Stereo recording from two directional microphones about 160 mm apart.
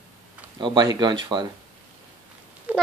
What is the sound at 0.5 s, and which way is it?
Speech, 30° right (ahead or behind).